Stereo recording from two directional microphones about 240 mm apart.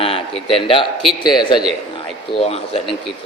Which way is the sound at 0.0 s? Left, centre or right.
Left.